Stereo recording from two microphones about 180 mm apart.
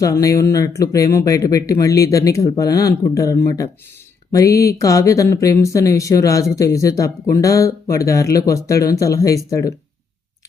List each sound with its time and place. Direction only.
0.0 s speech: 20° left (ahead or behind)